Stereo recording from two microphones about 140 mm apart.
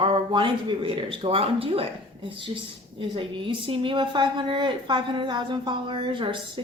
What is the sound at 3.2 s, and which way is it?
A woman's voice, 40° right (ahead or behind).